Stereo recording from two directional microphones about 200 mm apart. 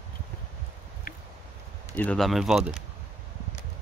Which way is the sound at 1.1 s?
45° left (ahead or behind).